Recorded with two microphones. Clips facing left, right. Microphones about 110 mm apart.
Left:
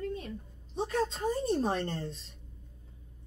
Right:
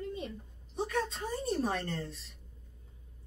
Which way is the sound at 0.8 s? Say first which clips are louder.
Left 3 dB; 30° left (ahead or behind).